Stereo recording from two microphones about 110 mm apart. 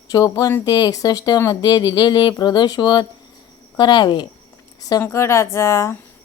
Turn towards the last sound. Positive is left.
turn(degrees=25)  # may be behind; listen again after turning